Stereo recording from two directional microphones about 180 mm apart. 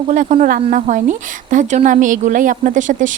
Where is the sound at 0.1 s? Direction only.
40° right (ahead or behind).